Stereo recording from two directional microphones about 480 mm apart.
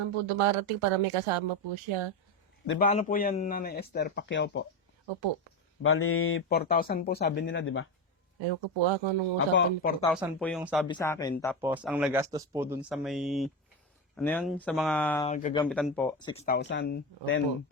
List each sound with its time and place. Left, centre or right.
0.0 s speech: right
2.6 s speech: centre
5.8 s speech: left
8.4 s speech: right
9.6 s speech: centre
10.1 s speech: centre
15.3 s speech: centre
15.6 s speech: centre; by 17.4 s left